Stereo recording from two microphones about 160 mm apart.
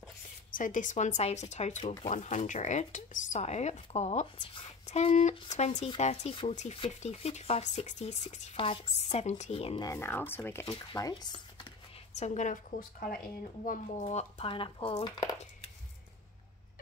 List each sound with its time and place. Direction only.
0.6 s speech: 55° left (ahead or behind); by 9.8 s 35° left (ahead or behind)
9.8 s speech: 15° left (ahead or behind)
10.9 s speech: 25° left (ahead or behind)
12.2 s speech: 50° left (ahead or behind); by 15.1 s 30° left (ahead or behind)